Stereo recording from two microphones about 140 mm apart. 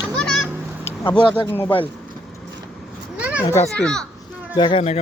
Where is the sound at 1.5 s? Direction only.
15° left (ahead or behind).